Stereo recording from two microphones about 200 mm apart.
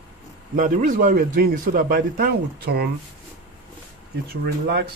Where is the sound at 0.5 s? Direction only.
40° right (ahead or behind).